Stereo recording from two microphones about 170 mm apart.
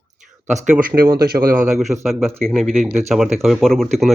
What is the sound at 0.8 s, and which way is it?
Speech, 60° right (ahead or behind).